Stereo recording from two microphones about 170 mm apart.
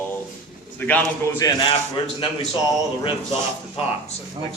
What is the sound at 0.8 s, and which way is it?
Speech, 10° left (ahead or behind).